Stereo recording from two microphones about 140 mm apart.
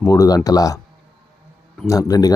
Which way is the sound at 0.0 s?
25° left (ahead or behind).